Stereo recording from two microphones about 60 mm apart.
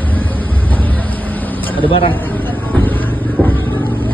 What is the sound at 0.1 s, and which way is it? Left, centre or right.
Vehicle, left.